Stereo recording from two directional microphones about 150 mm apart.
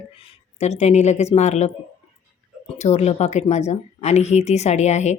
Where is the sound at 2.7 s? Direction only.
45° left (ahead or behind).